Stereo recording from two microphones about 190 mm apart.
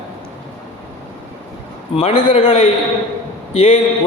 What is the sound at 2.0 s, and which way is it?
A man's voice, 30° left (ahead or behind).